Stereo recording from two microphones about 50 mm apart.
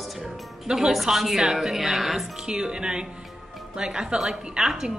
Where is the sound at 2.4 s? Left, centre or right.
Centre.